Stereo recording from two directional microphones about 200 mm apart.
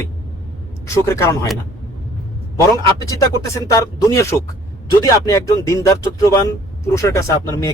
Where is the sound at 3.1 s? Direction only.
20° left (ahead or behind).